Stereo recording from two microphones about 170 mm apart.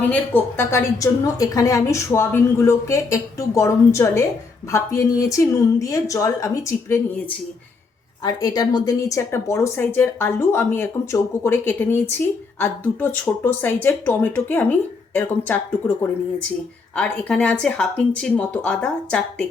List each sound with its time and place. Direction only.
0.1 s a woman's voice: 10° left (ahead or behind)
16.9 s a woman's voice: 5° left (ahead or behind)